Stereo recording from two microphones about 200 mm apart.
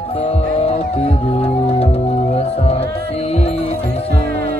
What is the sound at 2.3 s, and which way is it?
Music, 30° left (ahead or behind).